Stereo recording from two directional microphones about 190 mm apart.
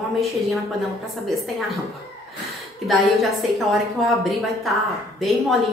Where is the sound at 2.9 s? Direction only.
Centre (ahead or behind).